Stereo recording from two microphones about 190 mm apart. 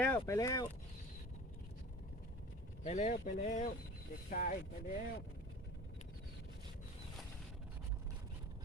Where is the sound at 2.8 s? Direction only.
35° left (ahead or behind).